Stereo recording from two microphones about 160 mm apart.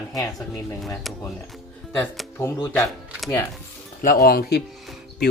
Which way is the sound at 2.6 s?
25° left (ahead or behind).